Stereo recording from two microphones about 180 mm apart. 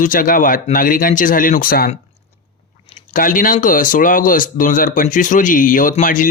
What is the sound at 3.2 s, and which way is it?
Speech, 50° left (ahead or behind).